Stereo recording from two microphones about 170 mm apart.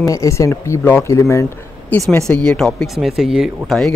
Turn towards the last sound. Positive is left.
turn(degrees=0)  # may be behind; listen again after turning